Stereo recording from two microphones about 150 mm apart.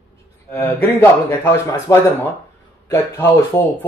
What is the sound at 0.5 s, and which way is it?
A man's voice, 15° left (ahead or behind).